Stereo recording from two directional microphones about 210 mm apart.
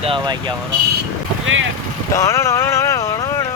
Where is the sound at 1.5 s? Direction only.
70° right (ahead or behind).